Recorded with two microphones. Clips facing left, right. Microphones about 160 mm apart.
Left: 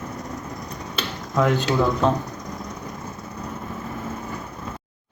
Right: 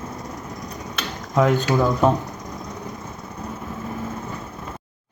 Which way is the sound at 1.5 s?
10° right (ahead or behind).